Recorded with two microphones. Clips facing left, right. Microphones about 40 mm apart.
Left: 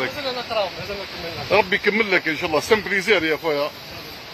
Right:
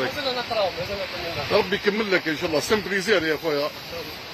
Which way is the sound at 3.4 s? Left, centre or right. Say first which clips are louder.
Left 2 dB; left.